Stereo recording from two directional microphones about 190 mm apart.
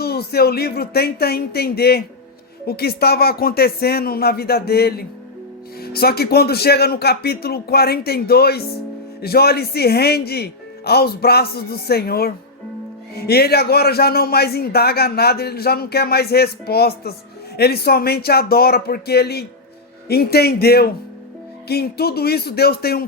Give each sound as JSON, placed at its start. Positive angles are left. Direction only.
{"t": 0.0, "sound": "a man's voice", "side_deg": 55}